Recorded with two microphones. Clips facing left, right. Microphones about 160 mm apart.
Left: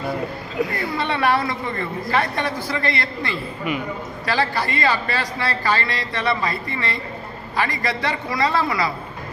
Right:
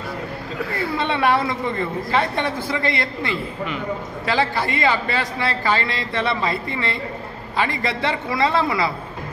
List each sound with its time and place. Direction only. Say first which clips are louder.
0.9 s a man's voice: right 1 dB; 20° right (ahead or behind)